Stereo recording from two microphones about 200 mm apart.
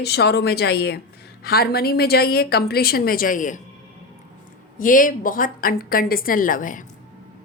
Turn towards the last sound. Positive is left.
turn(degrees=40)  # may be behind; listen again after turning